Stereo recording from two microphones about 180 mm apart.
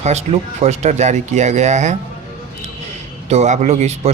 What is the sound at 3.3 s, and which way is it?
Speech, 40° right (ahead or behind).